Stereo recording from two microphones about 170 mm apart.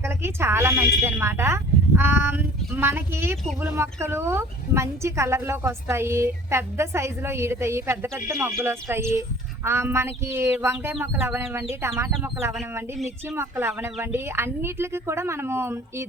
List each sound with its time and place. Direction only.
0.0 s speech: 15° right (ahead or behind)